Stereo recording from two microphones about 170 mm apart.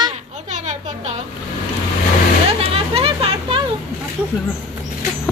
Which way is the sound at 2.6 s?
35° right (ahead or behind).